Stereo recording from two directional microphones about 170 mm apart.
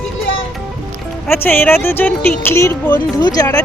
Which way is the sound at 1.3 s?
15° left (ahead or behind).